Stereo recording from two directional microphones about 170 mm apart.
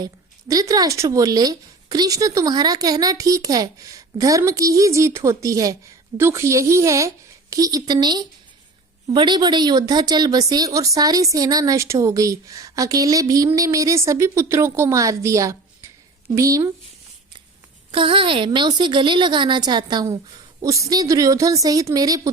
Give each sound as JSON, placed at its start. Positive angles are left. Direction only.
{"t": 0.0, "sound": "a woman's voice", "side_deg": -20}
{"t": 17.9, "sound": "a woman's voice", "side_deg": -30}